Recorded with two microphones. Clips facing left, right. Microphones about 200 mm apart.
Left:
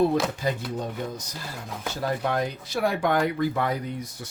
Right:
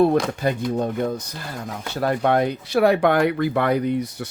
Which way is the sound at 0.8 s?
55° right (ahead or behind).